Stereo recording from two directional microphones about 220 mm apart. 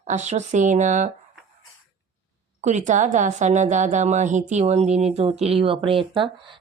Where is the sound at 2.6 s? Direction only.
35° right (ahead or behind).